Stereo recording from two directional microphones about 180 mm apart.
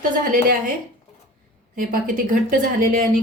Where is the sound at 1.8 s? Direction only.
50° right (ahead or behind).